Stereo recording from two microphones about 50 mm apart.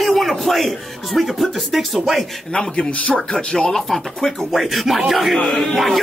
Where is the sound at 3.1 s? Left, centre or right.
Centre.